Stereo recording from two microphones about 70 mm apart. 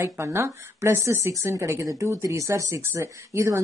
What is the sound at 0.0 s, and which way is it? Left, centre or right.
Speech, right.